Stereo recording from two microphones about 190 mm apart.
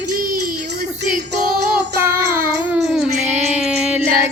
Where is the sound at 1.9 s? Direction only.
15° right (ahead or behind).